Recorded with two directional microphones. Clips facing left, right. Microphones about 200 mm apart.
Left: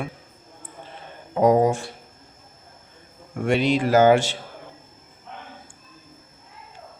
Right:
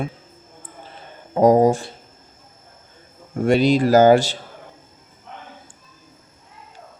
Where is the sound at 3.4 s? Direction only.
40° right (ahead or behind).